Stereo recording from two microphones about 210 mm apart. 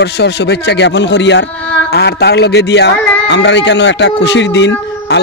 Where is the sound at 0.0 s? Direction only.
55° left (ahead or behind).